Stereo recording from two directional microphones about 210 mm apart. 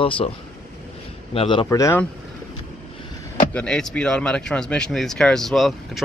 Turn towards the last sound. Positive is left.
turn(degrees=0)  # may be behind; listen again after turning